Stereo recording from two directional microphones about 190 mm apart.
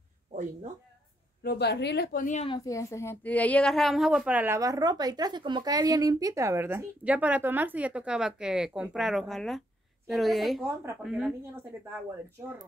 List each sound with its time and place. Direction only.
0.3 s speech: 40° right (ahead or behind)
1.4 s a woman's voice: 55° left (ahead or behind)
2.2 s speech: 35° left (ahead or behind)
2.5 s a woman's voice: 15° left (ahead or behind); by 10.6 s centre (ahead or behind)
10.6 s a woman's voice: 10° right (ahead or behind)